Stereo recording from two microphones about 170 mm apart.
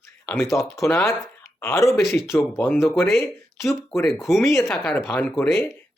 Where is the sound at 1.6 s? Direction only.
20° left (ahead or behind).